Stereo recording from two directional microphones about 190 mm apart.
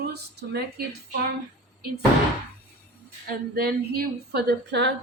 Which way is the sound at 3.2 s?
55° right (ahead or behind).